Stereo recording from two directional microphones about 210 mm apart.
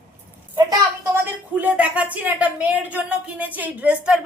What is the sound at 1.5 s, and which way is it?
Speech, 5° right (ahead or behind).